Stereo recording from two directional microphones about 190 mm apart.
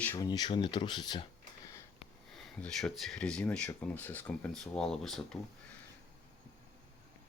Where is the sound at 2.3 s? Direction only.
Centre (ahead or behind).